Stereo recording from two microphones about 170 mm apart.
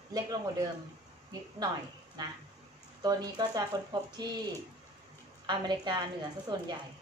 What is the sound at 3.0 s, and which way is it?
Speech, 25° right (ahead or behind).